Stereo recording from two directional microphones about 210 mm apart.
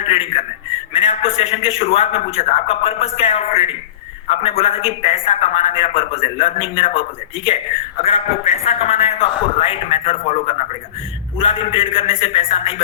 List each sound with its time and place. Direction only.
0.0 s a man's voice: 30° left (ahead or behind)
0.9 s a sound: 25° left (ahead or behind)
1.4 s a man's voice: 30° left (ahead or behind)